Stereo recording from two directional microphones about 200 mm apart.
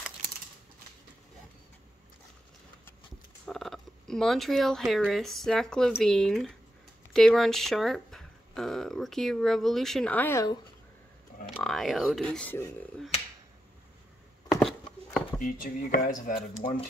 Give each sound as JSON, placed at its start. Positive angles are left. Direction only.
{"t": 3.4, "sound": "speech", "side_deg": 0}
{"t": 11.4, "sound": "speech", "side_deg": 0}
{"t": 14.5, "sound": "a sound", "side_deg": 0}
{"t": 15.4, "sound": "speech", "side_deg": 45}